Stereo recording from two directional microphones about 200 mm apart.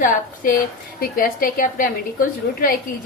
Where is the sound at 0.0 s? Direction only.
45° left (ahead or behind).